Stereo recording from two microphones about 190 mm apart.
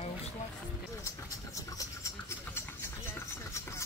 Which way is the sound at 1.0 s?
15° left (ahead or behind).